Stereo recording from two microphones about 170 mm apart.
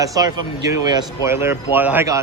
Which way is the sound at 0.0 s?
20° right (ahead or behind).